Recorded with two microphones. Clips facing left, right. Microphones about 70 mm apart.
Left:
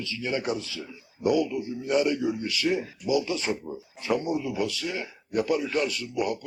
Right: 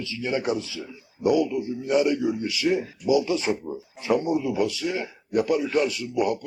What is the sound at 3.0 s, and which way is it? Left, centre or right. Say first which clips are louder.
A man's voice: right 5 dB; centre.